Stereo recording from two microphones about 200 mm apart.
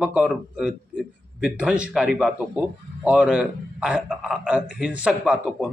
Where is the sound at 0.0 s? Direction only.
5° right (ahead or behind).